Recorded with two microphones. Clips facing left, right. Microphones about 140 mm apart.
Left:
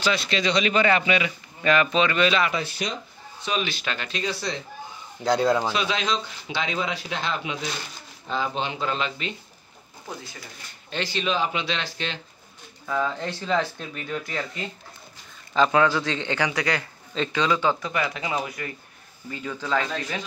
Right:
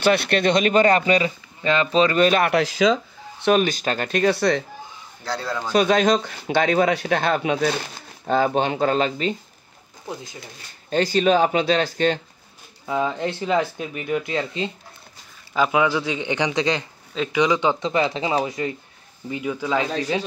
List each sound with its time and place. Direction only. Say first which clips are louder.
0.0 s speech: right 6 dB; 60° right (ahead or behind); by 1.3 s 40° right (ahead or behind)
1.6 s speech: right 2 dB; 25° right (ahead or behind); by 3.6 s 60° right (ahead or behind)
3.6 s speech: right 7 dB; 45° right (ahead or behind); by 4.6 s 60° right (ahead or behind)
5.2 s a man's voice: left 7 dB; 20° left (ahead or behind)
5.7 s speech: right 8 dB; 50° right (ahead or behind)
10.9 s speech: right 9 dB; 45° right (ahead or behind)
12.8 s speech: right 3 dB; 20° right (ahead or behind)
15.5 s speech: even; 10° right (ahead or behind)
17.1 s speech: right 4 dB; 10° right (ahead or behind)
19.9 s speech: right 7 dB; 35° right (ahead or behind)